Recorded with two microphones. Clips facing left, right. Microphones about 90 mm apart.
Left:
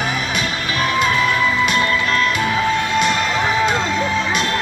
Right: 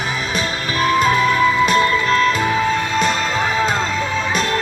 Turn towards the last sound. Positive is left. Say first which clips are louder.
# left 1 dB
turn(degrees=-35)  # may be behind; listen again after turning